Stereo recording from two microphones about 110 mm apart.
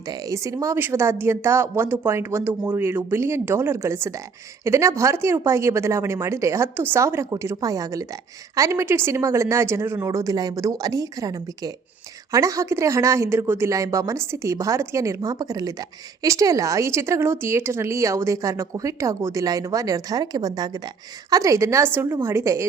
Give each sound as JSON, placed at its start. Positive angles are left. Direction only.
{"t": 0.1, "sound": "speech", "side_deg": -30}